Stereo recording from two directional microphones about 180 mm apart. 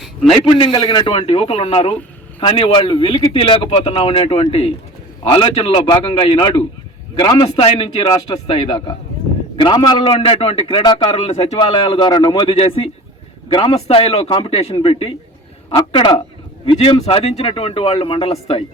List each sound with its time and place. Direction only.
0.6 s a man's voice: 25° left (ahead or behind)